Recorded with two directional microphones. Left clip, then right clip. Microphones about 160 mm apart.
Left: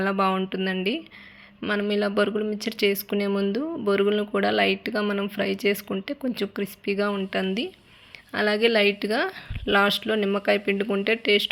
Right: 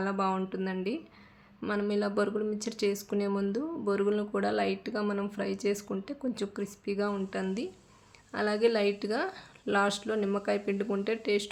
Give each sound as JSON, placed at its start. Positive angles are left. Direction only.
{"t": 0.0, "sound": "speech", "side_deg": 20}